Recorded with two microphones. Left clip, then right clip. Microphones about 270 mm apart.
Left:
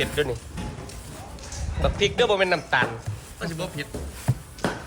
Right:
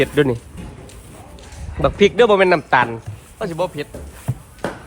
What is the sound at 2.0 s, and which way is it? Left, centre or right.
Speech, right.